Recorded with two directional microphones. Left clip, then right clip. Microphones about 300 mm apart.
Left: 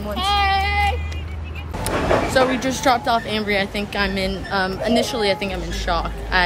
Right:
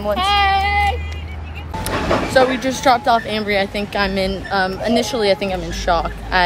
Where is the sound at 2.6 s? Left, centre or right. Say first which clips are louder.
Right 3 dB; centre.